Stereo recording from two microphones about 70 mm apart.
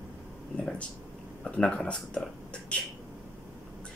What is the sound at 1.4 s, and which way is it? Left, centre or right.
Speech, centre.